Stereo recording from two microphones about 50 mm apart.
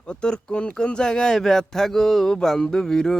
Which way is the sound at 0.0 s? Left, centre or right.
Centre.